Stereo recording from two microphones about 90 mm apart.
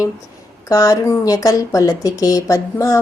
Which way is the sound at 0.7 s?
40° left (ahead or behind).